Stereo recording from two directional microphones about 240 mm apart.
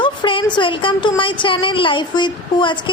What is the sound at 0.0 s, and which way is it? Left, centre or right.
Speech, left.